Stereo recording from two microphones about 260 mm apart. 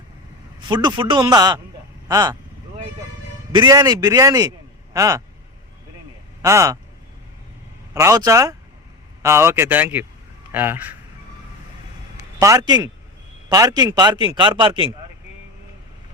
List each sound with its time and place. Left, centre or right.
0.7 s a man's voice: centre
3.5 s a man's voice: centre
6.4 s a man's voice: centre
7.9 s a man's voice: centre
12.4 s a man's voice: centre